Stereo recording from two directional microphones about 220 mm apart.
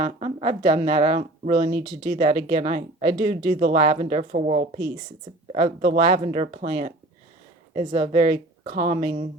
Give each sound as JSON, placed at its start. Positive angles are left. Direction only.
{"t": 0.0, "sound": "a woman's voice", "side_deg": -30}
{"t": 6.2, "sound": "a woman's voice", "side_deg": -30}
{"t": 7.9, "sound": "a woman's voice", "side_deg": -35}
{"t": 8.6, "sound": "speech", "side_deg": -20}
{"t": 8.9, "sound": "a woman's voice", "side_deg": -35}